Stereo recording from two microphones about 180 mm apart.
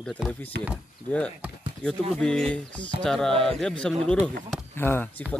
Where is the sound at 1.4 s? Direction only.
5° right (ahead or behind).